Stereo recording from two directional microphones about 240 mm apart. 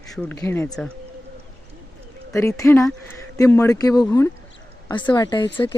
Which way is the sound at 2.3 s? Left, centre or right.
Centre.